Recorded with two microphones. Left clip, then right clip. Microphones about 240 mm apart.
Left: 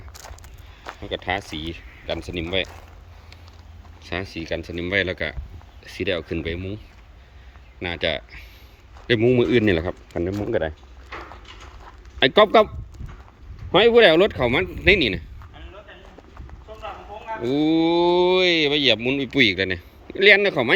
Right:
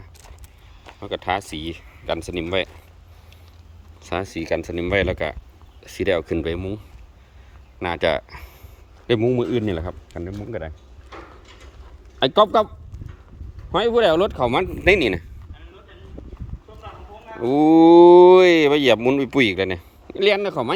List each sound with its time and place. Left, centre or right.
0.9 s speech: centre
4.0 s speech: centre
7.8 s speech: centre
9.0 s a man's voice: centre
10.2 s speech: centre
12.2 s a man's voice: centre
13.7 s speech: centre
16.8 s speech: centre